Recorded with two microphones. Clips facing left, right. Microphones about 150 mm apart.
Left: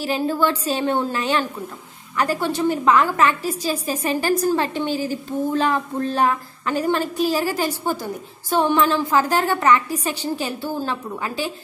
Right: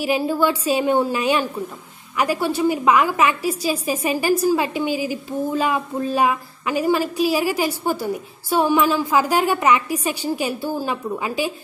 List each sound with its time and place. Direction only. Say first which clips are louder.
0.0 s a woman's voice: right 1 dB; 10° right (ahead or behind)